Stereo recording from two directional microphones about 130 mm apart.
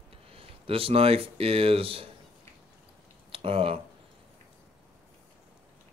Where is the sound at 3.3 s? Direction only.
45° right (ahead or behind).